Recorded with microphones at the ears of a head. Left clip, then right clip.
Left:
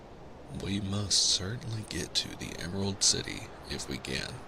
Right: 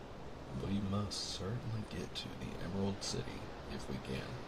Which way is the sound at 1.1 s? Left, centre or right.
Left.